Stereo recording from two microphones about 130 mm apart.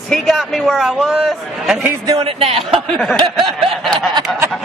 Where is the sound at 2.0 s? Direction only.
45° right (ahead or behind).